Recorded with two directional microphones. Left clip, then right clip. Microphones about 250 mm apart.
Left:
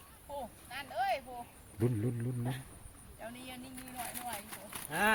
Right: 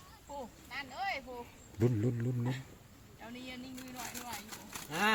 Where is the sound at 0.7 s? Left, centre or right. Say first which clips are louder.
Left 4 dB; left.